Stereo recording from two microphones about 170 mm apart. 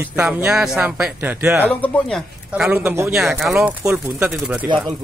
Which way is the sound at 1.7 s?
5° left (ahead or behind).